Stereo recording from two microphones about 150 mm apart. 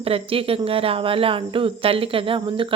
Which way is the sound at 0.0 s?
40° right (ahead or behind).